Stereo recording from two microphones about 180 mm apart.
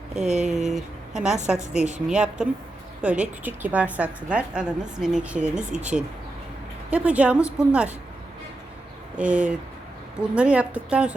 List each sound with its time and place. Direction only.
0.3 s speech: 40° right (ahead or behind)
0.7 s a woman's voice: centre (ahead or behind)
9.1 s a woman's voice: 5° right (ahead or behind)